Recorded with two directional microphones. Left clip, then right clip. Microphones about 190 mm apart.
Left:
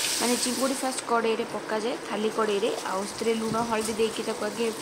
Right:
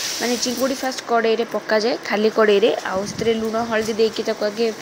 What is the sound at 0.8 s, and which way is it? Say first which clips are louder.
Speech: right 8 dB; 15° right (ahead or behind).